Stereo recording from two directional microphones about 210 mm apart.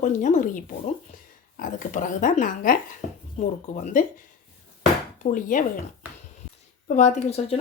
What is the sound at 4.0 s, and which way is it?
Speech, 40° left (ahead or behind).